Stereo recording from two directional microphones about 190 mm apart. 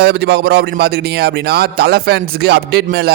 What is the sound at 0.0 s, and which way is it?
Speech, 60° right (ahead or behind).